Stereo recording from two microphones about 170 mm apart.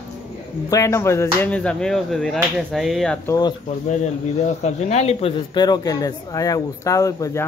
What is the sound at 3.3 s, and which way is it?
Speech, 25° left (ahead or behind).